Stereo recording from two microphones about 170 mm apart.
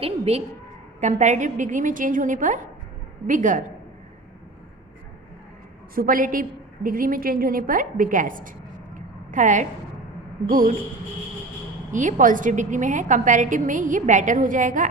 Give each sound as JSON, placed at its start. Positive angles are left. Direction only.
{"t": 0.0, "sound": "a woman's voice", "side_deg": -35}
{"t": 5.9, "sound": "a woman's voice", "side_deg": -55}
{"t": 9.0, "sound": "a sound", "side_deg": -50}
{"t": 11.9, "sound": "a woman's voice", "side_deg": -50}